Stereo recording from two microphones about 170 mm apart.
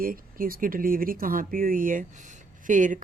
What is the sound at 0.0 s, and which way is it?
Speech, 55° right (ahead or behind).